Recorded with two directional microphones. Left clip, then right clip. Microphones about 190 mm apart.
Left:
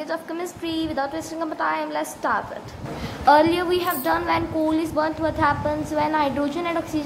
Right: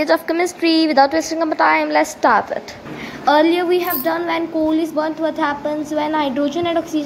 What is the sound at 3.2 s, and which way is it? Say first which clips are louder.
A woman's voice: right 2 dB; 5° right (ahead or behind).